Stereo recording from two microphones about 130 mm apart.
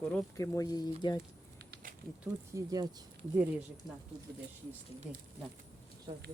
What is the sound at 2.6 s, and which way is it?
Speech, 30° right (ahead or behind).